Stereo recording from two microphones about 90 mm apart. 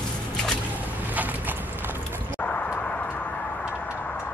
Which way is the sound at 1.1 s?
20° right (ahead or behind).